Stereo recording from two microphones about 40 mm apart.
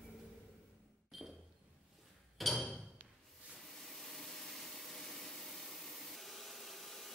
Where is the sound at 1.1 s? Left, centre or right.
Centre.